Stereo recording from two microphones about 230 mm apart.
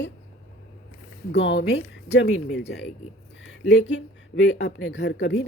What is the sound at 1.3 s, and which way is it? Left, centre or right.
Speech, left.